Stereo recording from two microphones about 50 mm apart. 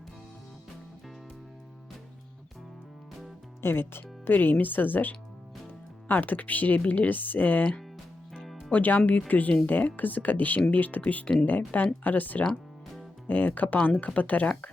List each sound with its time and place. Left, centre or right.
3.6 s speech: left